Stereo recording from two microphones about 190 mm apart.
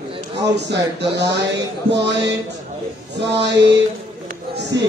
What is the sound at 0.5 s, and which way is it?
Speech, 65° right (ahead or behind).